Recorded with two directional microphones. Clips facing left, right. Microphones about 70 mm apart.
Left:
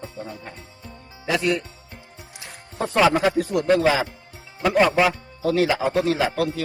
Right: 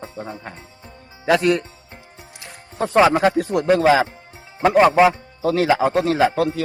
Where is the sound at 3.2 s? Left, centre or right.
Right.